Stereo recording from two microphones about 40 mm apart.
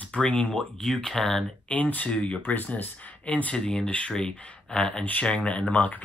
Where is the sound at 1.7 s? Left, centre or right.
Left.